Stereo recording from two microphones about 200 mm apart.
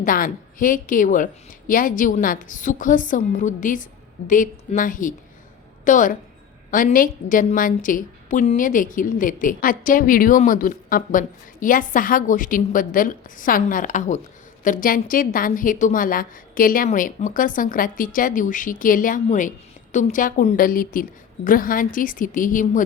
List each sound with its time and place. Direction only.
0.0 s a woman's voice: 45° left (ahead or behind)